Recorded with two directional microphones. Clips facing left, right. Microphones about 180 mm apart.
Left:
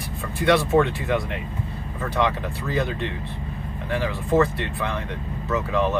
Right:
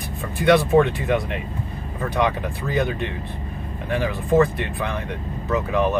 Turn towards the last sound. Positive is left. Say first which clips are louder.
# right 2 dB
turn(degrees=-15)  # may be behind; listen again after turning